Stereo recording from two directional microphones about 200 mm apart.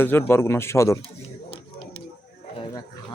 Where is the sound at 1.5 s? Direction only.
25° left (ahead or behind).